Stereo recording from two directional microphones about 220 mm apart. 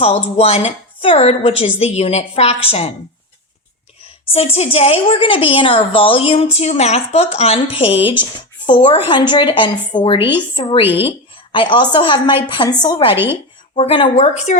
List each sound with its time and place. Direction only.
0.0 s a woman's voice: 25° left (ahead or behind)
4.3 s a woman's voice: 25° left (ahead or behind)